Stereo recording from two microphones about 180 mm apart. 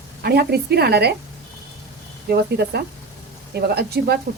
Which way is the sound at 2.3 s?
65° right (ahead or behind).